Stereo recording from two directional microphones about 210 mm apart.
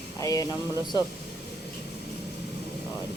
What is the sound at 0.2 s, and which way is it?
Speech, 15° left (ahead or behind).